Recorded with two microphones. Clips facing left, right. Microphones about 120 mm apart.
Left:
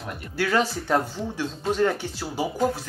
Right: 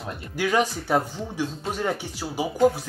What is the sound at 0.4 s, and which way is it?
Speech, 15° right (ahead or behind).